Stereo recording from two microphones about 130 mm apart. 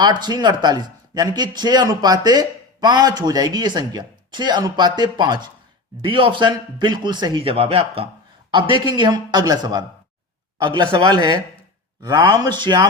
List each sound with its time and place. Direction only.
0.0 s speech: 35° right (ahead or behind)